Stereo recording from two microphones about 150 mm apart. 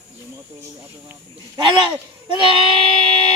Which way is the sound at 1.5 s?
30° right (ahead or behind).